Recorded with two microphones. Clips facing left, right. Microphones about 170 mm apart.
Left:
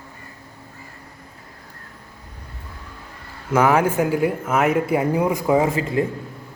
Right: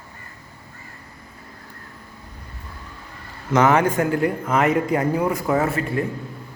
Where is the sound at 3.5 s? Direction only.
5° left (ahead or behind).